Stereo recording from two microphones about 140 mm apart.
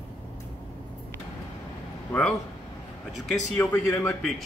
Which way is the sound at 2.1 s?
10° left (ahead or behind).